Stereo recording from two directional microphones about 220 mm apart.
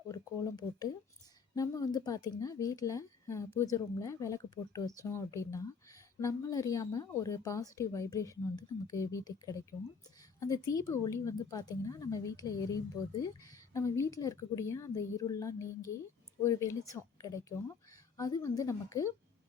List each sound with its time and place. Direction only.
0.1 s a woman's voice: 15° left (ahead or behind)